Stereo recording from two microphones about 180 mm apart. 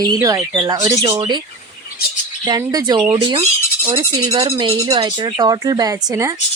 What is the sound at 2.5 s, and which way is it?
Speech, 20° right (ahead or behind).